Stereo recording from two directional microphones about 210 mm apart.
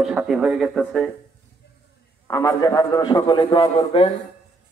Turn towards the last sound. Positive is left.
turn(degrees=25)  # may be behind; listen again after turning